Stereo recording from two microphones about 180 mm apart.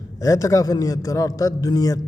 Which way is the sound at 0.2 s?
20° left (ahead or behind).